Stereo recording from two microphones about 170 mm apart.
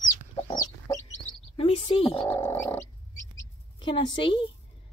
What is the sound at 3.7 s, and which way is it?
Speech, 30° left (ahead or behind).